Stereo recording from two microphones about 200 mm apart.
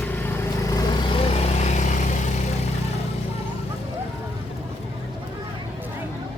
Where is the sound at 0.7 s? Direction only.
30° left (ahead or behind).